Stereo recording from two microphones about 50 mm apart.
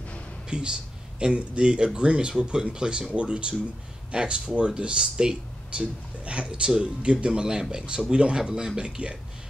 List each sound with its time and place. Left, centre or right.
0.5 s speech: centre